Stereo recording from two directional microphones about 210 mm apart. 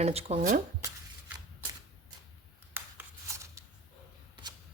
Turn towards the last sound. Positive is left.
turn(degrees=-10)  # may be behind; listen again after turning